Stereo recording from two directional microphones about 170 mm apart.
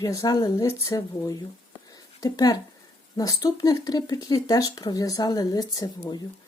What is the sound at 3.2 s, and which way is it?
Speech, 20° left (ahead or behind).